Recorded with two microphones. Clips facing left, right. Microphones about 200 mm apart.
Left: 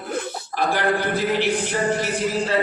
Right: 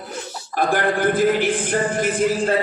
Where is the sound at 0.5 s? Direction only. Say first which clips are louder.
Right 2 dB; 50° right (ahead or behind).